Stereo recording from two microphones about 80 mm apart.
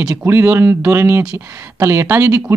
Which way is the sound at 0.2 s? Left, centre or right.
Right.